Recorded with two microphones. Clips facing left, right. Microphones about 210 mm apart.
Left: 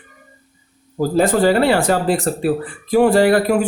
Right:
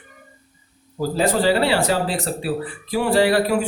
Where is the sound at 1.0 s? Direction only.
50° left (ahead or behind).